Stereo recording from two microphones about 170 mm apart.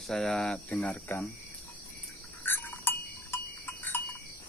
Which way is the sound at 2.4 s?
10° left (ahead or behind).